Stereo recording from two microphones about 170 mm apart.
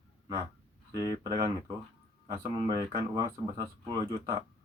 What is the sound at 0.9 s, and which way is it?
Speech, 25° right (ahead or behind).